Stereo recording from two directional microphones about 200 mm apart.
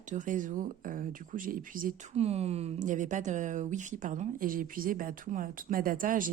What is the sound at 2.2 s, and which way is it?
Speech, 30° right (ahead or behind).